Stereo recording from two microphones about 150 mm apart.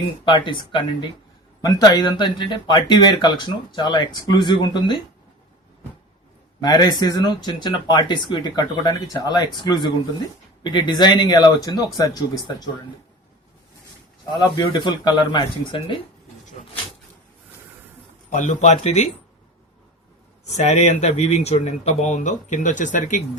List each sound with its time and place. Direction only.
0.3 s speech: 35° left (ahead or behind)
6.6 s speech: 30° left (ahead or behind)
10.6 s speech: 30° left (ahead or behind)
14.3 s speech: 30° left (ahead or behind)
18.3 s speech: 55° left (ahead or behind)
20.6 s speech: 50° left (ahead or behind)